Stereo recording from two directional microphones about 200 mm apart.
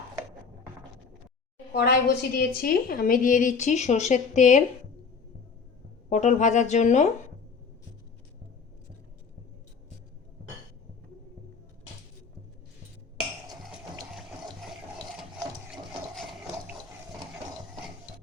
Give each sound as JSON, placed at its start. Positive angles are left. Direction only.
{"t": 1.7, "sound": "a woman's voice", "side_deg": 55}
{"t": 6.1, "sound": "a woman's voice", "side_deg": 35}
{"t": 15.2, "sound": "ratchet", "side_deg": 0}